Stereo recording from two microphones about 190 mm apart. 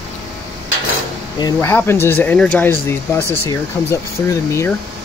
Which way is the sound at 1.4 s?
10° left (ahead or behind).